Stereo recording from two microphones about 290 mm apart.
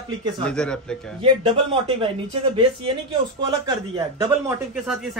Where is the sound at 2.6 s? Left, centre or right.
Centre.